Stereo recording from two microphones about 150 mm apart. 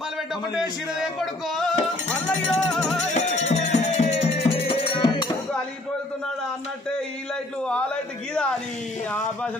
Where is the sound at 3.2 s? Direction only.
50° left (ahead or behind).